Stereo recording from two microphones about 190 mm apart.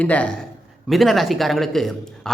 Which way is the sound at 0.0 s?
5° left (ahead or behind).